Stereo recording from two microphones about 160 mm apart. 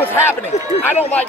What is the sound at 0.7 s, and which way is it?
Speech, 40° left (ahead or behind).